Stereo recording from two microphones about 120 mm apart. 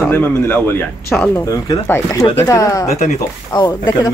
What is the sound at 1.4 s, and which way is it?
Speech, 30° left (ahead or behind).